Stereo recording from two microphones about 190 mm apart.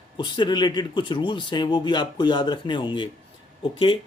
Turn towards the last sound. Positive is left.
turn(degrees=30)  # may be behind; listen again after turning